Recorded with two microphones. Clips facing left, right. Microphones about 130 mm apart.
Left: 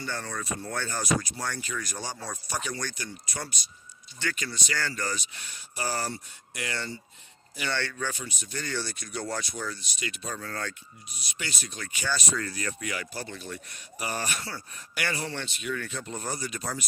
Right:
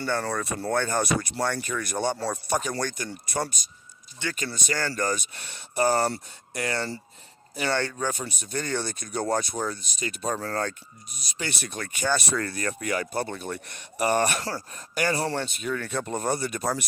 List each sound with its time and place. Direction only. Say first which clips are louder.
0.0 s speech: right 7 dB; 60° right (ahead or behind)
6.5 s speech: right 6 dB; 40° right (ahead or behind)
11.4 s speech: right 6 dB; 55° right (ahead or behind); by 15.9 s 40° right (ahead or behind)
15.9 s speech: right 8 dB; 55° right (ahead or behind)